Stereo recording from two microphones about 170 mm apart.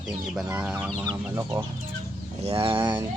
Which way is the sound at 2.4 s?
30° right (ahead or behind).